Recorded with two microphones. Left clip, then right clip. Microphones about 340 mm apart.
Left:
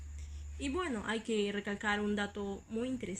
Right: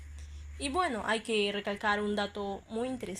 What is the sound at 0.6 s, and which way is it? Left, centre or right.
A woman's voice, centre.